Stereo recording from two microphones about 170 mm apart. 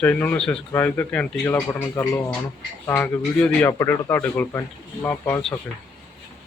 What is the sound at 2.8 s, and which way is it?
Speech, 15° left (ahead or behind).